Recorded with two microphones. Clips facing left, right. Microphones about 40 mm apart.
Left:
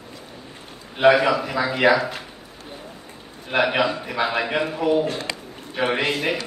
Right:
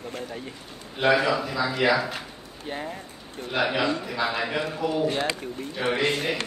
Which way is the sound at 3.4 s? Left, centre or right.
Left.